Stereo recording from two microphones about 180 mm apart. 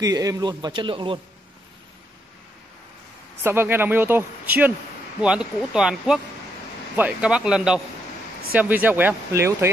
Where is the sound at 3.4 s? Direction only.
10° right (ahead or behind).